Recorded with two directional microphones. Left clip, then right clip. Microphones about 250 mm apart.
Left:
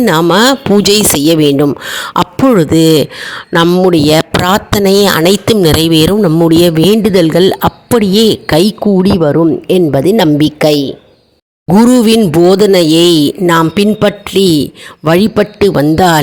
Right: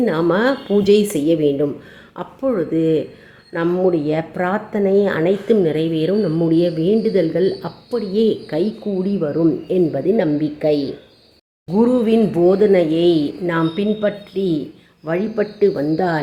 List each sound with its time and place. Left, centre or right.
0.0 s speech: left